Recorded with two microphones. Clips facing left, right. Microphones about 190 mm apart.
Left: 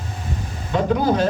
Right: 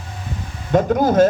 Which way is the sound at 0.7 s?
45° right (ahead or behind).